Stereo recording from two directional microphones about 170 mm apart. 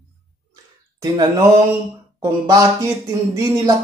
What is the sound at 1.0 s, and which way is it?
Speech, 25° right (ahead or behind).